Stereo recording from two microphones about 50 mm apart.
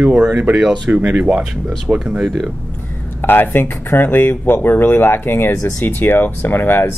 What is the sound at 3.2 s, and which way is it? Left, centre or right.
Speech, left.